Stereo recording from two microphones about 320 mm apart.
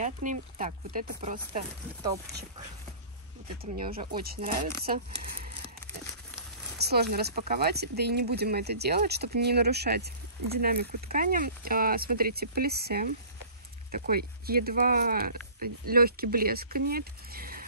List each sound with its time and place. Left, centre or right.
0.0 s speech: right
3.7 s speech: right
6.8 s speech: right